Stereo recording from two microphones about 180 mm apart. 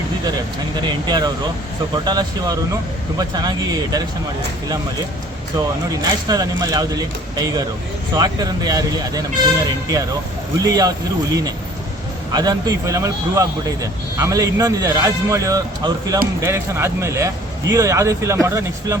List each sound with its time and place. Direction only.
0.8 s speech: 25° right (ahead or behind)
5.5 s speech: 20° right (ahead or behind)
12.3 s speech: 20° right (ahead or behind)